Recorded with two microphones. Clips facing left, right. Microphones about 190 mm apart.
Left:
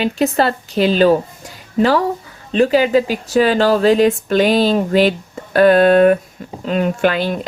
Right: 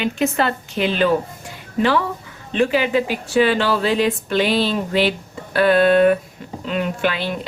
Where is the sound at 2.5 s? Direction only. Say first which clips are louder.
Left 5 dB; 40° left (ahead or behind).